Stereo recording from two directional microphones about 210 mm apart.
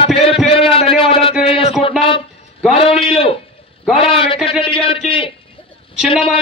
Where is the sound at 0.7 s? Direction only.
25° left (ahead or behind).